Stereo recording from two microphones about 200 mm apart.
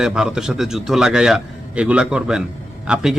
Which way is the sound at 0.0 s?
5° right (ahead or behind).